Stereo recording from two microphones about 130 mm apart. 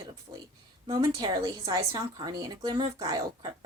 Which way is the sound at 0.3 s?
25° right (ahead or behind).